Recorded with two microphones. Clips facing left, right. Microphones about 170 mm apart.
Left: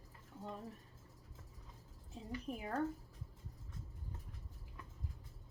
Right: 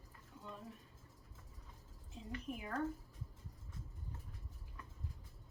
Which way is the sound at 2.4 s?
35° left (ahead or behind).